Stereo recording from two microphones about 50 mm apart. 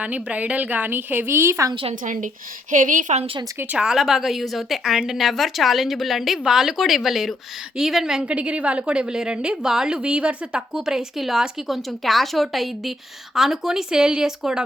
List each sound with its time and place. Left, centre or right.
0.0 s a woman's voice: right
3.8 s speech: centre
8.3 s a woman's voice: right
10.0 s a woman's voice: right
10.8 s speech: centre